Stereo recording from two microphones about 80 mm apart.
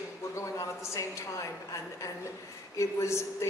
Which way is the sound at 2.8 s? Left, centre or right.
Left.